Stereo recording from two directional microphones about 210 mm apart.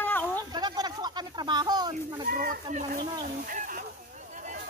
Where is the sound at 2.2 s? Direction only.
40° right (ahead or behind).